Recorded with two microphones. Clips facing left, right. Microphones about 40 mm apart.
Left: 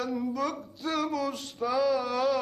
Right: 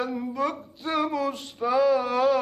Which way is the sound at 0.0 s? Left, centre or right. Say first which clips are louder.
Right 3 dB; right.